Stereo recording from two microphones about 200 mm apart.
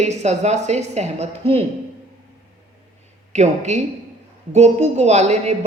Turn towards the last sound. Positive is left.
turn(degrees=-35)  # may be behind; listen again after turning